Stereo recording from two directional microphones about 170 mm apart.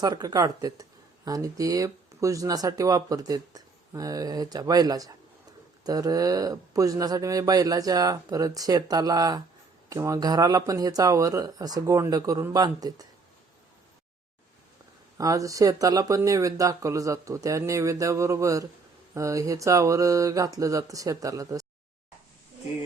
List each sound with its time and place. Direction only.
0.0 s speech: 25° right (ahead or behind)
15.2 s speech: 20° right (ahead or behind)